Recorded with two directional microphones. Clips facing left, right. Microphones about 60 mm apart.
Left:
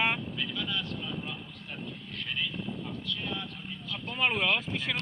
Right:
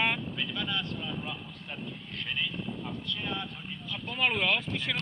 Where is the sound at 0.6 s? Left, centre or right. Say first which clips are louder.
Right 1 dB; right.